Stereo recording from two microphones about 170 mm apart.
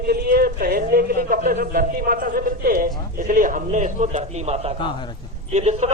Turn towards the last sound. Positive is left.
turn(degrees=-40)  # may be behind; listen again after turning